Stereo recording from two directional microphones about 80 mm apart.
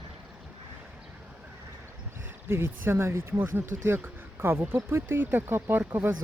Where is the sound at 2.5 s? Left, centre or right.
Right.